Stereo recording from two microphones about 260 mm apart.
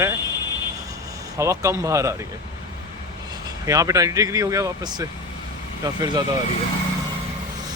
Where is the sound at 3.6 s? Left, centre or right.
Centre.